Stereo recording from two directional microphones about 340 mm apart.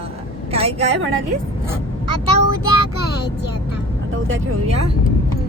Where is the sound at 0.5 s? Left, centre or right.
Centre.